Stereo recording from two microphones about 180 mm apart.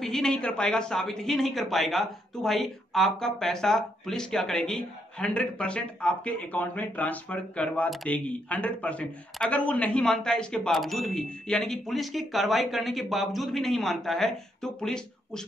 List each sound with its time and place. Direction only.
0.0 s a woman's voice: 5° left (ahead or behind)